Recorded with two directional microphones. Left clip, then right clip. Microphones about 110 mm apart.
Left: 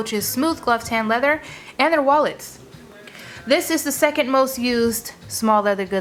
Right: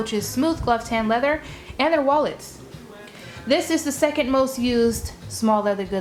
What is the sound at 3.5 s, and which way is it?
A woman's voice, 40° left (ahead or behind).